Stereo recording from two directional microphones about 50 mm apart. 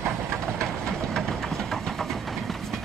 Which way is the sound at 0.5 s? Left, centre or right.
Centre.